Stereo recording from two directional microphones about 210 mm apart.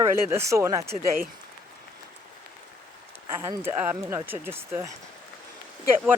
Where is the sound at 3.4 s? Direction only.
10° right (ahead or behind).